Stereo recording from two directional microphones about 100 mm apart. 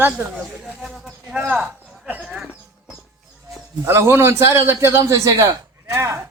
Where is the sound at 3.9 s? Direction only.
25° right (ahead or behind).